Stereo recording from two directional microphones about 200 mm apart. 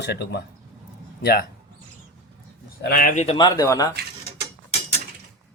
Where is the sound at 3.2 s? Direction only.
20° left (ahead or behind).